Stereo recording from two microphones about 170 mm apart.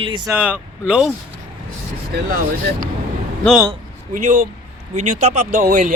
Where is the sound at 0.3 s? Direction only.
5° right (ahead or behind).